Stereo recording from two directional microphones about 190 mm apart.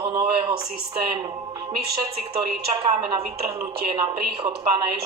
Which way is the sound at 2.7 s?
30° right (ahead or behind).